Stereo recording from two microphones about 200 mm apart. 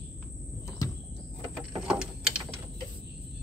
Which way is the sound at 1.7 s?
5° right (ahead or behind).